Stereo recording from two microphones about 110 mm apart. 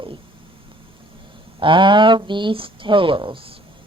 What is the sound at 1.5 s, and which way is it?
A woman's voice, 50° right (ahead or behind).